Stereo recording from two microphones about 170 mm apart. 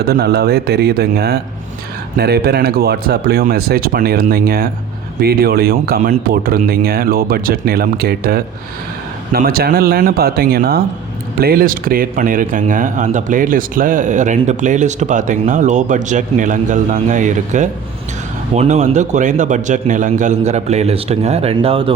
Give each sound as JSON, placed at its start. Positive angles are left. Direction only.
{"t": 0.0, "sound": "a man's voice", "side_deg": -70}